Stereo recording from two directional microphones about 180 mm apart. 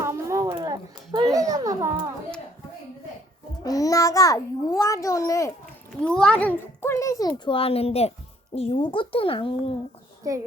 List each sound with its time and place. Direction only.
0.0 s a sound: 15° right (ahead or behind)
3.6 s a child's voice: 20° left (ahead or behind)
6.0 s a woman's voice: 5° left (ahead or behind); by 9.7 s 30° left (ahead or behind)
10.3 s child singing: 20° right (ahead or behind)